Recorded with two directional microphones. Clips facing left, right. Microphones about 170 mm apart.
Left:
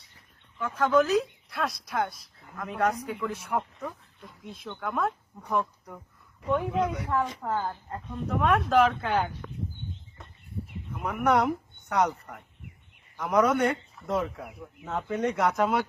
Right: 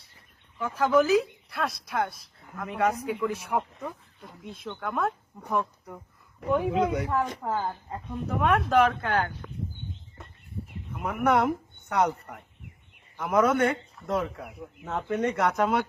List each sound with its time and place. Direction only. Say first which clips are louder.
0.6 s a woman's voice: right 1 dB; 10° right (ahead or behind)
6.8 s a woman's voice: right 4 dB; 90° right
7.1 s a woman's voice: even; 5° right (ahead or behind)
10.9 s a woman's voice: even; centre (ahead or behind)